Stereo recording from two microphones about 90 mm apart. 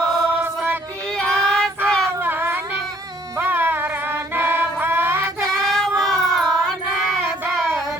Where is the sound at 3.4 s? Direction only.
20° right (ahead or behind).